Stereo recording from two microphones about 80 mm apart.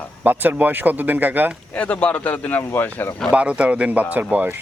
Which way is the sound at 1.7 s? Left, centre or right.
Centre.